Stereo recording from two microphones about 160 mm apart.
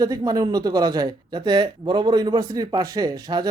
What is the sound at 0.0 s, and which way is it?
Speech, 25° right (ahead or behind).